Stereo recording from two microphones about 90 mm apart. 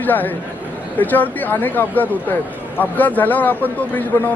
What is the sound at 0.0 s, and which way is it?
Speech, 20° left (ahead or behind).